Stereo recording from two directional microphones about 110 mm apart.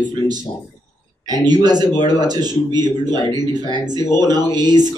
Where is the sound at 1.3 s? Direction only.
40° right (ahead or behind).